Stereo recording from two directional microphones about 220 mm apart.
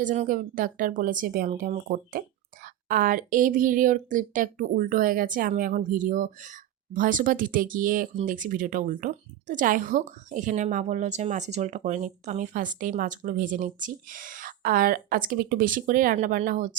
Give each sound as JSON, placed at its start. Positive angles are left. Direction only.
{"t": 0.0, "sound": "speech", "side_deg": -35}